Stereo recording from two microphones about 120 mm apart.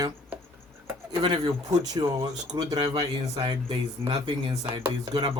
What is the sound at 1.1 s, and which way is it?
Speech, 40° right (ahead or behind).